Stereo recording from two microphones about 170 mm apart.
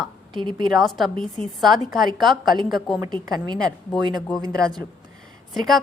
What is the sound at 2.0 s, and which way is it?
A woman's voice, 25° right (ahead or behind).